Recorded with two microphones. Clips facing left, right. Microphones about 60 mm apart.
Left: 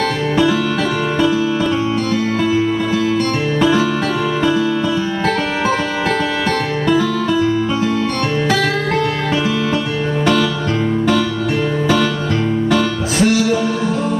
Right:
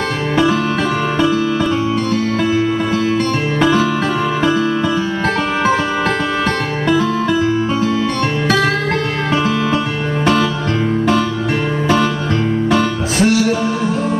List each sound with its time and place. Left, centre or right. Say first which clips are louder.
12.6 s music: right 1 dB; right